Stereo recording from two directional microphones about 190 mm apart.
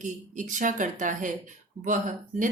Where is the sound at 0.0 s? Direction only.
40° right (ahead or behind).